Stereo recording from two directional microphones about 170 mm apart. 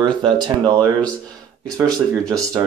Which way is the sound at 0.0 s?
25° right (ahead or behind).